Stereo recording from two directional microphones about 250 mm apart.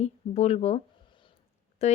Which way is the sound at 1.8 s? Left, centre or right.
Left.